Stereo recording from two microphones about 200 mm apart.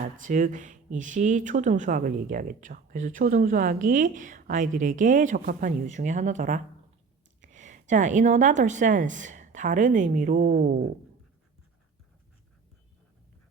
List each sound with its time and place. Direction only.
0.2 s a woman's voice: 40° right (ahead or behind)